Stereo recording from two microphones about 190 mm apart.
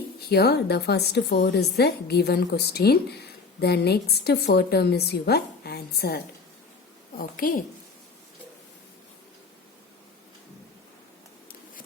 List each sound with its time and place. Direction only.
0.3 s a woman's voice: 60° left (ahead or behind)